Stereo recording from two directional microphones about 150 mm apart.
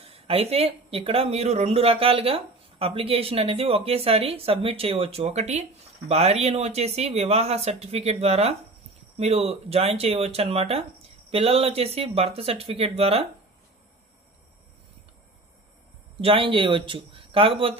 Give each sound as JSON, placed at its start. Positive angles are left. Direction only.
{"t": 0.0, "sound": "speech", "side_deg": -40}
{"t": 16.2, "sound": "speech", "side_deg": -35}